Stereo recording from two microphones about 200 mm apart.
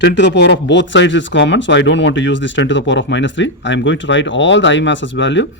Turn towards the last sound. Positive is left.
turn(degrees=65)  # may be behind; listen again after turning